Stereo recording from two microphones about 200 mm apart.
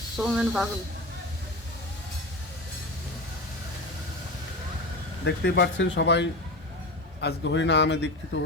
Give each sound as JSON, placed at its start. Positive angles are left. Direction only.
{"t": 0.2, "sound": "speech", "side_deg": -5}
{"t": 5.2, "sound": "speech", "side_deg": 60}